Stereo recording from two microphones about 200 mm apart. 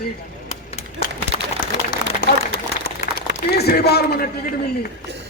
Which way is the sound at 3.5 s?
55° left (ahead or behind).